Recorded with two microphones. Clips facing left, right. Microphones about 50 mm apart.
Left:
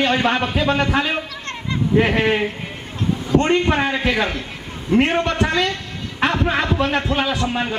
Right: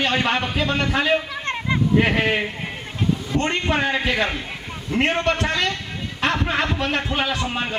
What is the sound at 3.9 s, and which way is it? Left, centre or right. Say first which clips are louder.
Speech: left 2 dB; centre.